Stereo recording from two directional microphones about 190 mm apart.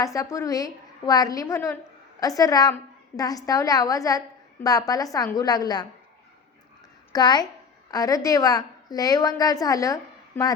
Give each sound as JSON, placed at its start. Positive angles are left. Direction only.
{"t": 0.0, "sound": "a woman's voice", "side_deg": 15}
{"t": 7.1, "sound": "a woman's voice", "side_deg": 20}